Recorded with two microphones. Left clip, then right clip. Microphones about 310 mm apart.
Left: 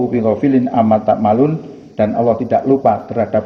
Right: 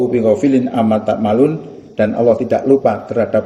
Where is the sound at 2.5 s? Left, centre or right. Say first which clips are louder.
Even; centre.